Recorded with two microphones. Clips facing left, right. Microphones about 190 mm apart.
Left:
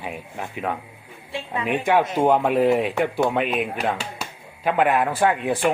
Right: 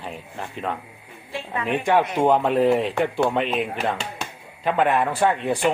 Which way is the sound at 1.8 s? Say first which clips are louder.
Even; 5° left (ahead or behind).